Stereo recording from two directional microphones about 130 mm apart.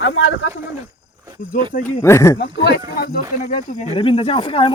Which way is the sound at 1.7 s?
80° left.